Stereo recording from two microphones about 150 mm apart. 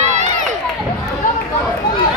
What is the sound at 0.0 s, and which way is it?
Run, 55° right (ahead or behind).